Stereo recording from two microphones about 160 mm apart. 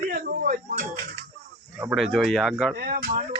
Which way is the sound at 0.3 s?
65° right (ahead or behind).